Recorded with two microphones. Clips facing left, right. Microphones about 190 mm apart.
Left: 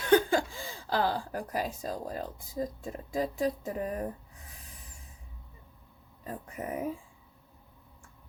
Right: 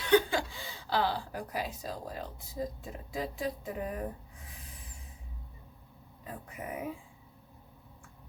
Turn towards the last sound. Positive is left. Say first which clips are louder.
# left 4 dB
turn(degrees=40)  # may be behind; listen again after turning